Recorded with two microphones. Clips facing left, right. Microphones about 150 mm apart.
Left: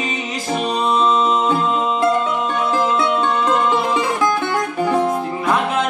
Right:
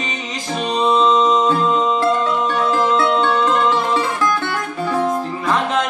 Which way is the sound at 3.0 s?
10° left (ahead or behind).